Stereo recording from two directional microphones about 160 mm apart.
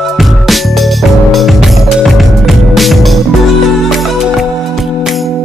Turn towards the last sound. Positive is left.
turn(degrees=0)  # may be behind; listen again after turning